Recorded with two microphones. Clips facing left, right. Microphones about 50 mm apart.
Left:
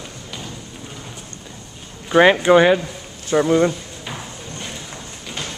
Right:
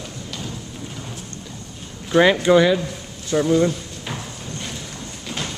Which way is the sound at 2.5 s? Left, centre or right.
Left.